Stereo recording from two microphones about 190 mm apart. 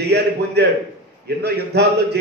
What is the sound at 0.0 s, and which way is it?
A man's voice, 60° right (ahead or behind).